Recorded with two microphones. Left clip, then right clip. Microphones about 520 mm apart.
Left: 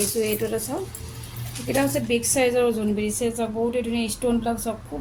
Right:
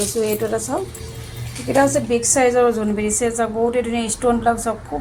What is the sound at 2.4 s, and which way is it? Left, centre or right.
A woman's voice, left.